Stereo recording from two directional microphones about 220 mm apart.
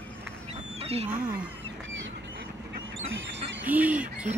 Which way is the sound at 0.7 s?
30° right (ahead or behind).